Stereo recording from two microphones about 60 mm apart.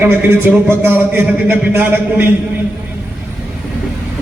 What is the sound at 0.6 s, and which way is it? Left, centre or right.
A man's voice, right.